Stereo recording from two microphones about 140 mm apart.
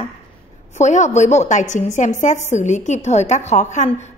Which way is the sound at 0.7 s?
55° left (ahead or behind).